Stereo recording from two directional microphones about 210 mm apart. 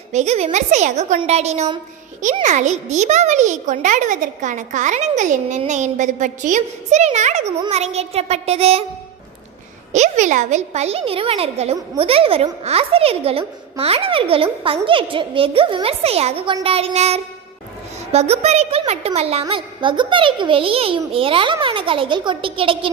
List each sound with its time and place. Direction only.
0.1 s a child's voice: 30° right (ahead or behind)
9.9 s a woman's voice: 35° right (ahead or behind)